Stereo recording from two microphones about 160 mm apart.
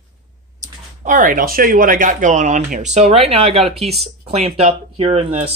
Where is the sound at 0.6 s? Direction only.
20° right (ahead or behind).